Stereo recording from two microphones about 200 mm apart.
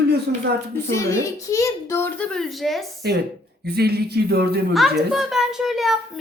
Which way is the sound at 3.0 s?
50° right (ahead or behind).